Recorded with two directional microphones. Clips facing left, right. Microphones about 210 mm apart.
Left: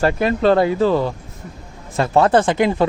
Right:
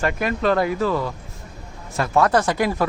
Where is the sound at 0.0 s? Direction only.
30° left (ahead or behind).